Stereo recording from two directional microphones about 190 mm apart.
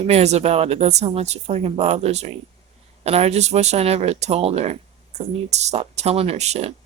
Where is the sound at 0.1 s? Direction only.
35° right (ahead or behind).